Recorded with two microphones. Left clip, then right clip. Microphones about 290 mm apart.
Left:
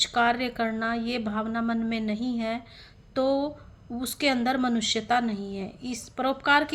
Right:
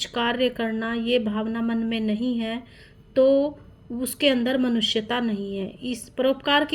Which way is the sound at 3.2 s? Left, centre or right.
Left.